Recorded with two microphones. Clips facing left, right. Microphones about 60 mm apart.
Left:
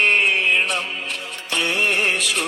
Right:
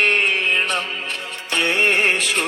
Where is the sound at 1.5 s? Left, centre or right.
Right.